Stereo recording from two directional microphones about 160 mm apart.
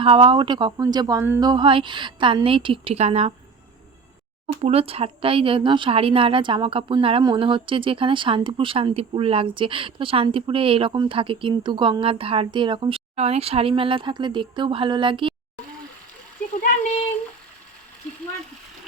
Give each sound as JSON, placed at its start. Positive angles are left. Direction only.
{"t": 0.0, "sound": "a woman's voice", "side_deg": -35}
{"t": 4.6, "sound": "a woman's voice", "side_deg": -35}
{"t": 16.6, "sound": "speech", "side_deg": 55}